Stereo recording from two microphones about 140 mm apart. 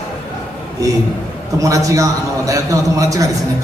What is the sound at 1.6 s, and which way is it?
A man's voice, 25° right (ahead or behind).